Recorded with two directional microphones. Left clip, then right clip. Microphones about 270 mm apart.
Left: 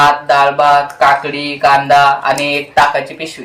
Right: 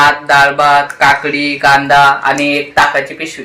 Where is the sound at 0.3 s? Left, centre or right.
Centre.